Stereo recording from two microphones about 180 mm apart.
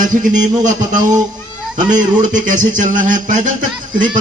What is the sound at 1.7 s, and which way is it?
Speech, 45° right (ahead or behind).